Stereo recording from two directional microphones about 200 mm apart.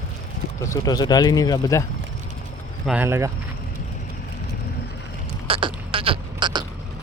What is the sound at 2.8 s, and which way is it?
Speech, 10° right (ahead or behind).